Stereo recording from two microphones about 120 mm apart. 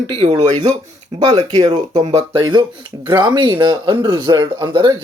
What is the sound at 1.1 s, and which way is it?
Speech, 45° right (ahead or behind).